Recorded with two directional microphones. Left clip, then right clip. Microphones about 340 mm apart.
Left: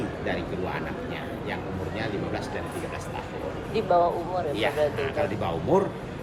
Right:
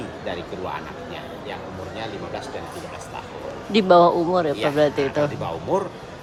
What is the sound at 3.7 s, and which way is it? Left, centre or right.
Speech, right.